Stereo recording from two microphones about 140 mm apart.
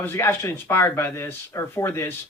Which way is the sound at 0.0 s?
15° left (ahead or behind).